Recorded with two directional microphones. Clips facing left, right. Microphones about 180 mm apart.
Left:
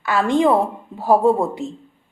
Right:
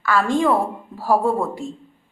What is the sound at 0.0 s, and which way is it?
A woman's voice, 20° left (ahead or behind).